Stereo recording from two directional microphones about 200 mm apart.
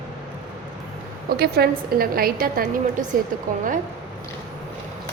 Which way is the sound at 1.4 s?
50° right (ahead or behind).